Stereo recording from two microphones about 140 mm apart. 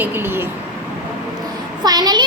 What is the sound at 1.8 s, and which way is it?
Speech, 30° right (ahead or behind).